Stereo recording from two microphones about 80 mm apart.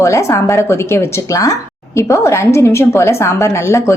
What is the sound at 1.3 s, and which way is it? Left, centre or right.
A woman's voice, left.